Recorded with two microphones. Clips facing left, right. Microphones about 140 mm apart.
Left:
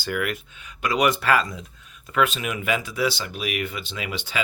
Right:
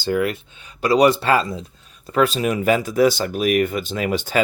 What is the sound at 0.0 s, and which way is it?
Speech, 30° right (ahead or behind).